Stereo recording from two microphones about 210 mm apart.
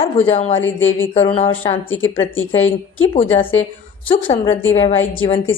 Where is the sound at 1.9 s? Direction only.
70° left (ahead or behind).